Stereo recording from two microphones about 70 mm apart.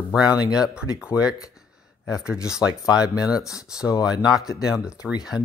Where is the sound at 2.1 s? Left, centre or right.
Centre.